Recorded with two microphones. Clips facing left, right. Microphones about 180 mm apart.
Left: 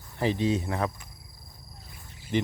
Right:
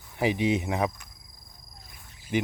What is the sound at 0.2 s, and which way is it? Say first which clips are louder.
Speech: right 1 dB; 15° right (ahead or behind).